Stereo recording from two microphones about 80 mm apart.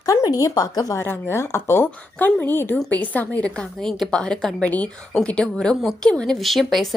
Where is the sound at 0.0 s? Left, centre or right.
Left.